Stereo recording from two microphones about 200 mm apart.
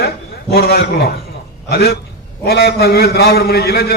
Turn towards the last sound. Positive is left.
turn(degrees=50)  # may be behind; listen again after turning